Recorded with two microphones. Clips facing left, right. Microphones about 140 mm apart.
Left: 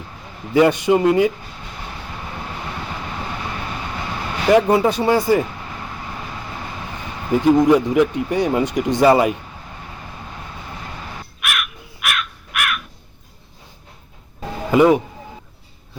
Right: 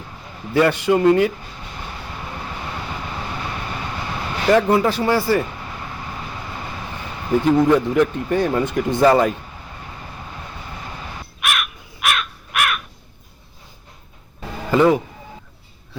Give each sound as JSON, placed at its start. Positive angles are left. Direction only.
{"t": 0.5, "sound": "a man's voice", "side_deg": 20}
{"t": 4.5, "sound": "speech", "side_deg": 15}
{"t": 7.4, "sound": "speech", "side_deg": 15}
{"t": 11.3, "sound": "crow", "side_deg": -30}
{"t": 14.7, "sound": "speech", "side_deg": 15}